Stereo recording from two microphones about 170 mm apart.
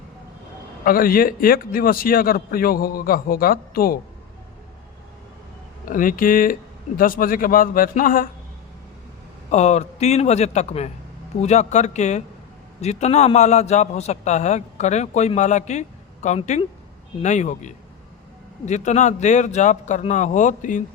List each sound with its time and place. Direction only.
0.9 s a man's voice: 60° left (ahead or behind)
5.8 s a man's voice: 55° left (ahead or behind)
9.5 s a man's voice: 40° left (ahead or behind)